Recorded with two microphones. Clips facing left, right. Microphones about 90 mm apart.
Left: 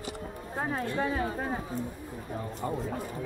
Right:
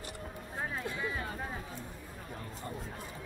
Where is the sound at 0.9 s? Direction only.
60° left (ahead or behind).